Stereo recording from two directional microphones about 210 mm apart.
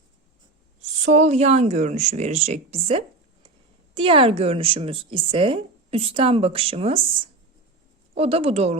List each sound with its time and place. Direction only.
1.0 s a woman's voice: 35° right (ahead or behind)
8.1 s speech: 30° right (ahead or behind)